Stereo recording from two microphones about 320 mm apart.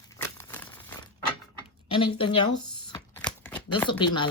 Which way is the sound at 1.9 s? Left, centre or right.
Centre.